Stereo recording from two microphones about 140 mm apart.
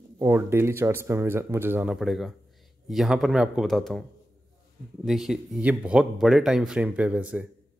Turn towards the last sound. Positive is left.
turn(degrees=-10)  # may be behind; listen again after turning